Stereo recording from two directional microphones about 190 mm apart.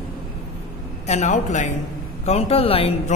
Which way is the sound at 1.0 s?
35° left (ahead or behind).